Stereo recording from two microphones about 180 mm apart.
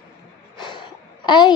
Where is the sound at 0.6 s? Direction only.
25° left (ahead or behind).